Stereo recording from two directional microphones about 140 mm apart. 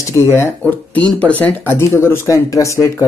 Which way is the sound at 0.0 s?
20° left (ahead or behind).